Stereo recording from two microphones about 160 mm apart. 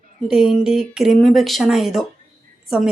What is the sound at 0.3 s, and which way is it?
Speech, 5° right (ahead or behind).